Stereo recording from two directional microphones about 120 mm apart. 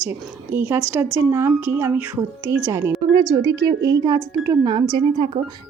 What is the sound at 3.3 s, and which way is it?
A woman's voice, 35° right (ahead or behind).